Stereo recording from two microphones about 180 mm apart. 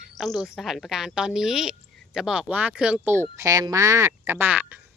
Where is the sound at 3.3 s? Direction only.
20° right (ahead or behind).